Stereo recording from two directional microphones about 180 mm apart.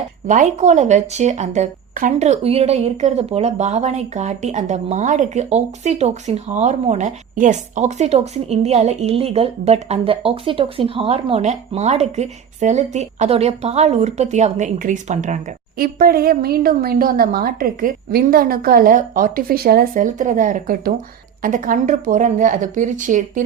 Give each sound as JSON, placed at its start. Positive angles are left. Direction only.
{"t": 0.3, "sound": "a woman's voice", "side_deg": -40}
{"t": 15.8, "sound": "a woman's voice", "side_deg": -55}